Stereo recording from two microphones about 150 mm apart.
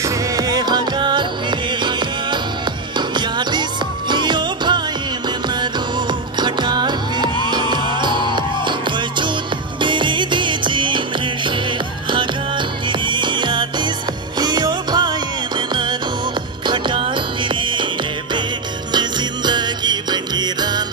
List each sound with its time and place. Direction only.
0.0 s music: 25° right (ahead or behind)
6.4 s music: 30° right (ahead or behind)
9.8 s music: 30° right (ahead or behind)
13.0 s music: 30° right (ahead or behind)
16.6 s music: 30° right (ahead or behind)
18.9 s music: 30° right (ahead or behind)